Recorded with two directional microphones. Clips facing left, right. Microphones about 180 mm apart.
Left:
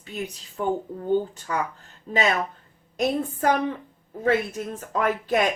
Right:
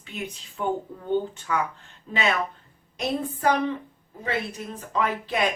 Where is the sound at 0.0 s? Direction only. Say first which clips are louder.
Left 2 dB; 40° left (ahead or behind).